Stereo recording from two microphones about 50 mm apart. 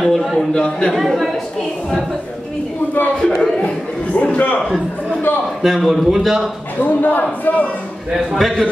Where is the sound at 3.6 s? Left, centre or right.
Left.